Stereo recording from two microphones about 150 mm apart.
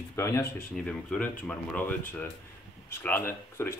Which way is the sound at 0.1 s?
20° left (ahead or behind).